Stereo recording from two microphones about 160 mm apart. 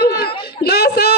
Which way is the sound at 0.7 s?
90° left.